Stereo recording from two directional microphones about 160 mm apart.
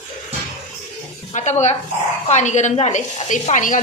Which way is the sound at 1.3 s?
45° left (ahead or behind).